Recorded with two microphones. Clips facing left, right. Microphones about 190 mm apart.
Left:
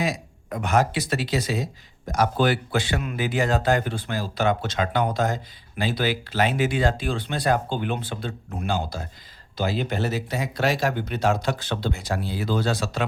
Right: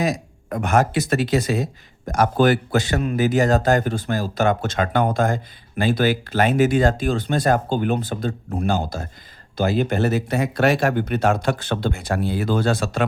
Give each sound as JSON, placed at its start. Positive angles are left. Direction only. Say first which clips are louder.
{"t": 0.0, "sound": "speech", "louder": "right 4 dB", "side_deg": -50}